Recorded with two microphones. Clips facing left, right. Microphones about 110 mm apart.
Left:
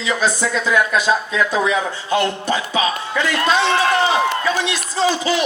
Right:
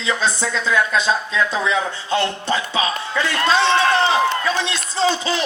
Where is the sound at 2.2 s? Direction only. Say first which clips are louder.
Left 2 dB; 20° left (ahead or behind).